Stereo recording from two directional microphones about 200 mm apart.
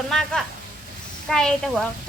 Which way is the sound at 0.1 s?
Centre (ahead or behind).